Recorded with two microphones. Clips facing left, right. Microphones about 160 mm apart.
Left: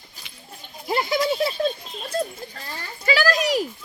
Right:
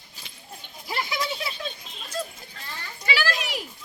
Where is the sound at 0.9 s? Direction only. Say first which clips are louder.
Left 8 dB; 45° left (ahead or behind).